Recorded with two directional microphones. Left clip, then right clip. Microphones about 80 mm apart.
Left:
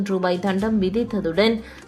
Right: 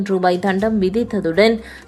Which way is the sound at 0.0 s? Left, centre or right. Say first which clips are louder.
Right 5 dB; right.